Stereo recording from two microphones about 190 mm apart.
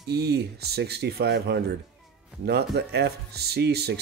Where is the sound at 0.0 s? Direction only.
60° right (ahead or behind).